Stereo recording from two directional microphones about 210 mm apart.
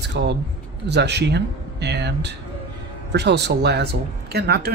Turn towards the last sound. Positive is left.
turn(degrees=-50)  # may be behind; listen again after turning